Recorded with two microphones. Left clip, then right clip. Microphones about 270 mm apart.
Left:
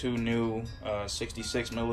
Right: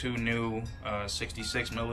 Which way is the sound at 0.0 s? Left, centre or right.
Centre.